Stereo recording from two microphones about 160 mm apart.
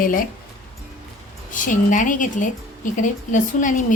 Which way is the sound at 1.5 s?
55° left (ahead or behind).